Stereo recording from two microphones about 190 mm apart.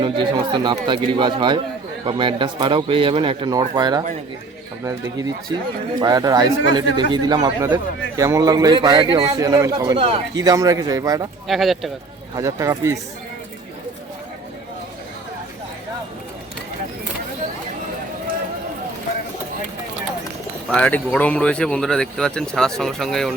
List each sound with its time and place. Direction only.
0.0 s speech: 25° right (ahead or behind)
6.0 s speech: 20° right (ahead or behind)
11.4 s speech: centre (ahead or behind)
12.4 s speech: 15° right (ahead or behind)
20.7 s speech: 5° left (ahead or behind)